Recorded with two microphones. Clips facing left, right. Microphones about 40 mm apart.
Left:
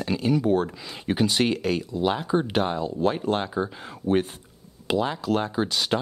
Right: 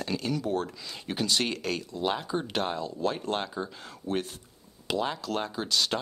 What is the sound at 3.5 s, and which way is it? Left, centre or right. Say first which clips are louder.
Speech: left 7 dB; left.